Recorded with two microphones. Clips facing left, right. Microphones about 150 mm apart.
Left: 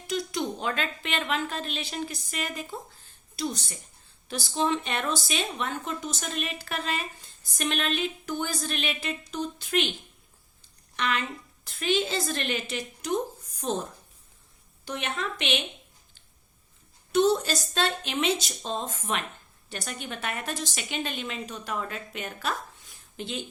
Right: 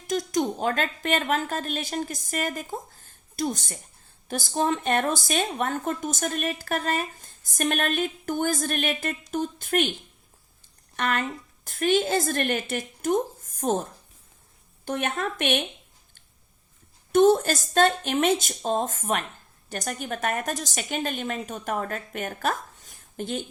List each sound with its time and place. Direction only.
0.1 s speech: 45° right (ahead or behind)
10.9 s speech: 50° right (ahead or behind)
14.8 s speech: 50° right (ahead or behind)
17.1 s speech: 50° right (ahead or behind)